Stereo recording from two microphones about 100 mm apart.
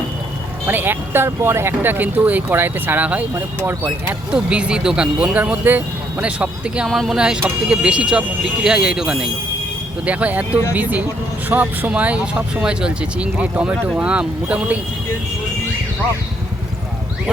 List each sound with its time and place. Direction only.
0.7 s speech: 20° right (ahead or behind)
6.8 s speech: centre (ahead or behind)